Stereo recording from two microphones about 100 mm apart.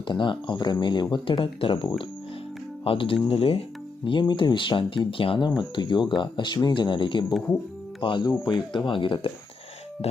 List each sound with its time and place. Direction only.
0.1 s speech: 55° left (ahead or behind); by 3.6 s 70° left (ahead or behind)
4.0 s speech: 55° left (ahead or behind)
5.7 s speech: 50° left (ahead or behind)